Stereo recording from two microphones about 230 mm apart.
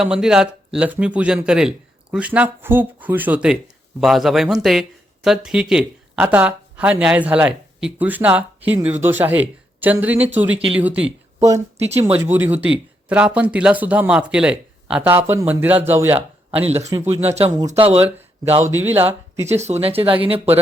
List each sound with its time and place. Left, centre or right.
0.0 s speech: centre
11.0 s speech: right
12.1 s speech: centre
16.6 s speech: right
18.7 s speech: centre
19.5 s speech: right